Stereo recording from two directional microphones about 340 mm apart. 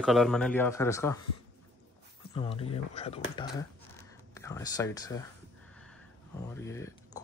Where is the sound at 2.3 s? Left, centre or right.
Centre.